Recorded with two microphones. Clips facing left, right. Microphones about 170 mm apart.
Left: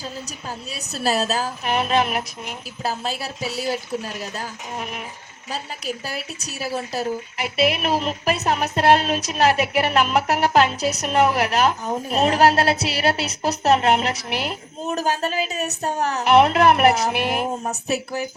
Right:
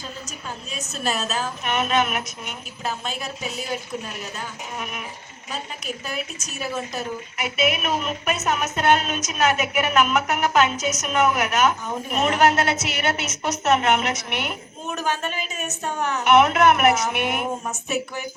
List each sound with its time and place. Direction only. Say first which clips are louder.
0.7 s a woman's voice: left 4 dB; 35° left (ahead or behind)